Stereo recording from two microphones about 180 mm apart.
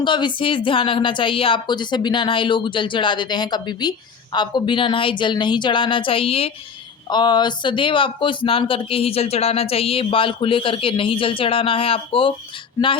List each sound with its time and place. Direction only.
0.0 s speech: 25° left (ahead or behind)